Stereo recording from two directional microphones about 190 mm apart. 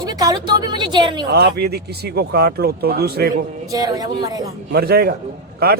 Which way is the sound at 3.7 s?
20° right (ahead or behind).